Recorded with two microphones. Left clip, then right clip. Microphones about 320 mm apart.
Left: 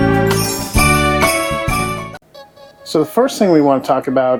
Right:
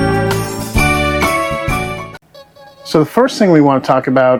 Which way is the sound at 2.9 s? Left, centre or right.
Right.